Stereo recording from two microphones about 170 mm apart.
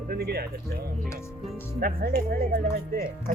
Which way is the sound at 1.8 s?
55° right (ahead or behind).